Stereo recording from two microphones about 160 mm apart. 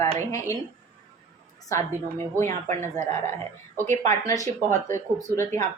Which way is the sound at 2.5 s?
50° right (ahead or behind).